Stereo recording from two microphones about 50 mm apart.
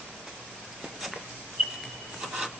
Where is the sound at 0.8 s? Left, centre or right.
Centre.